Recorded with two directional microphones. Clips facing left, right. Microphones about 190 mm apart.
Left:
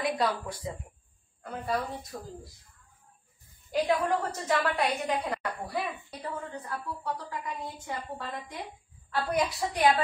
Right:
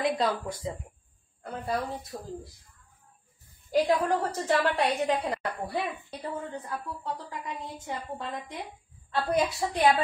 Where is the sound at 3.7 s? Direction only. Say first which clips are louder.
Right 2 dB; 30° right (ahead or behind).